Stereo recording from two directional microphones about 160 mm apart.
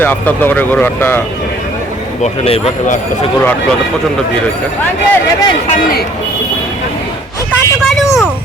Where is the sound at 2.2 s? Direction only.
40° left (ahead or behind).